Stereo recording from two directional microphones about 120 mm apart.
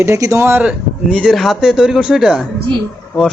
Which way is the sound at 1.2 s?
Centre (ahead or behind).